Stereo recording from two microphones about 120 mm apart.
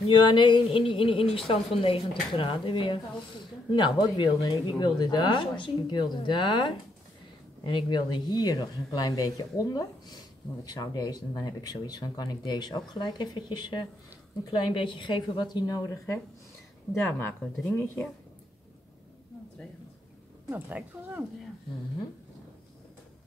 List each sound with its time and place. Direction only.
0.1 s a woman's voice: 40° left (ahead or behind)
17.2 s speech: 15° left (ahead or behind)
20.4 s speech: 15° right (ahead or behind)